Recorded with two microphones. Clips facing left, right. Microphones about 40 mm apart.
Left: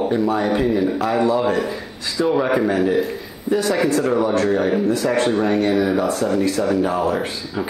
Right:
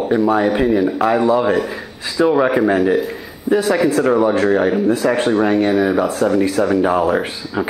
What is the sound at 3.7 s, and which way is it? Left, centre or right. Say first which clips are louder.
Speech: right 3 dB; centre.